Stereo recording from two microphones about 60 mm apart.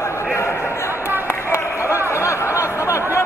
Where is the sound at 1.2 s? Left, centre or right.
Left.